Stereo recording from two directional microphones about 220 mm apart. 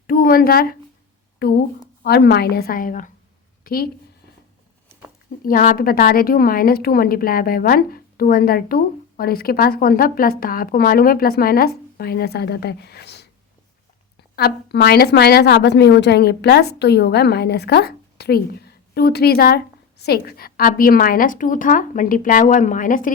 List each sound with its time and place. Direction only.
0.1 s a woman's voice: 40° left (ahead or behind)
5.4 s a woman's voice: 40° left (ahead or behind)
14.3 s a woman's voice: 45° left (ahead or behind)